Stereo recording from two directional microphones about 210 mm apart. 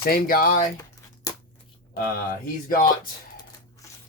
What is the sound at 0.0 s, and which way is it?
Speech, 45° left (ahead or behind).